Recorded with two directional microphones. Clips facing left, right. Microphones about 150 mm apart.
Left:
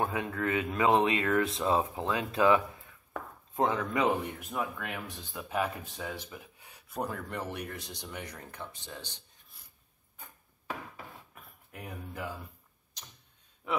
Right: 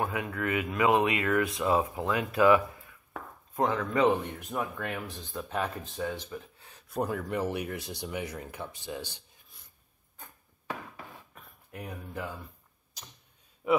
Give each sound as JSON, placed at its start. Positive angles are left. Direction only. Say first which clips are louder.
{"t": 0.0, "sound": "speech", "louder": "even", "side_deg": 30}
{"t": 4.6, "sound": "speech", "louder": "right 2 dB", "side_deg": 5}
{"t": 6.9, "sound": "speech", "louder": "right 5 dB", "side_deg": -5}
{"t": 13.6, "sound": "a man's voice", "louder": "right 7 dB", "side_deg": -10}